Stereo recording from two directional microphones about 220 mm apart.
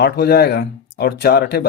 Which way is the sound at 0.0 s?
45° left (ahead or behind).